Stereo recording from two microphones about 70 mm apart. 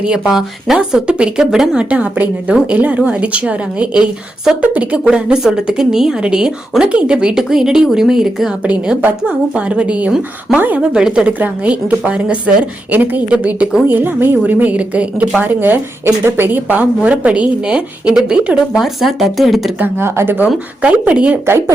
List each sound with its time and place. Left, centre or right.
0.0 s speech: centre; by 10.8 s right
10.9 s speech: centre
19.8 s speech: right
20.8 s speech: centre